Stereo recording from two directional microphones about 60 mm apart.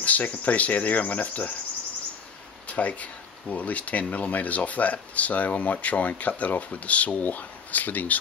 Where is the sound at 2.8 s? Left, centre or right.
Left.